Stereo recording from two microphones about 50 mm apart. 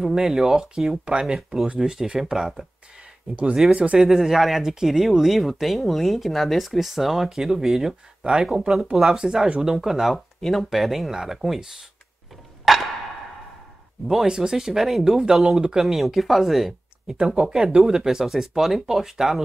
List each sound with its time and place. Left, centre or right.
0.0 s speech: centre
3.7 s speech: right
4.1 s speech: centre
8.9 s speech: centre
10.1 s speech: centre
12.7 s a sound: centre
14.2 s speech: centre